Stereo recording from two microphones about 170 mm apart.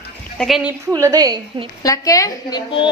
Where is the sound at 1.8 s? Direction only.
20° left (ahead or behind).